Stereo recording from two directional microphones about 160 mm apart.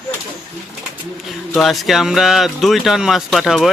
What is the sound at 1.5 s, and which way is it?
Speech, centre (ahead or behind).